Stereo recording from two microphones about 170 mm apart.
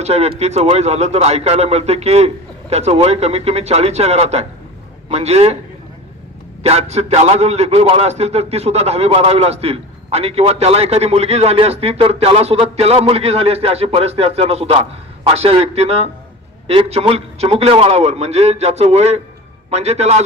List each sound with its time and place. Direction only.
0.0 s a man's voice: 40° right (ahead or behind)
6.6 s a man's voice: 40° right (ahead or behind)